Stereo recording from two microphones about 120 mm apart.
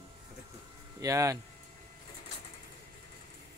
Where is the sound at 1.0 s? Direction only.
25° right (ahead or behind).